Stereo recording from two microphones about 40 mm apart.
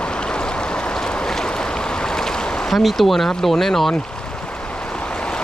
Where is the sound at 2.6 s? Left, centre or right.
Centre.